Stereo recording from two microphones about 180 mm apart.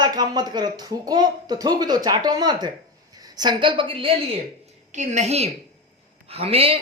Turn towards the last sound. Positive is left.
turn(degrees=-30)  # may be behind; listen again after turning